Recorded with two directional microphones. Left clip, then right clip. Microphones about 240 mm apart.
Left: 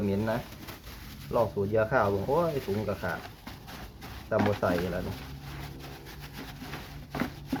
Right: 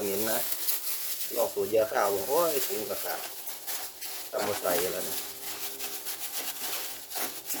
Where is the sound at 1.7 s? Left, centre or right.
Right.